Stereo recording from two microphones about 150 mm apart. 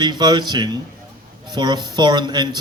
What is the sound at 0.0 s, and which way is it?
A man's voice, 30° right (ahead or behind).